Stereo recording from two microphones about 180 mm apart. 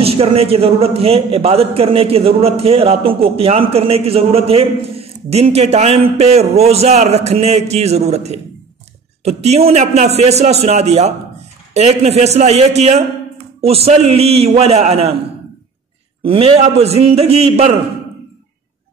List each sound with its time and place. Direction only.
0.0 s a man's voice: 35° right (ahead or behind)
16.3 s a man's voice: 30° right (ahead or behind)